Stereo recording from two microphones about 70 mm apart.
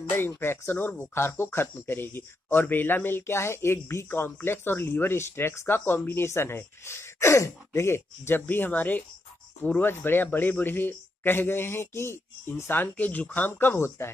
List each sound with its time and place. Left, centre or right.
0.3 s speech: left